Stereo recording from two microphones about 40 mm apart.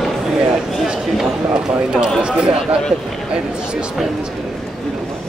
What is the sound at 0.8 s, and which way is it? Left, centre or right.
Speech, centre.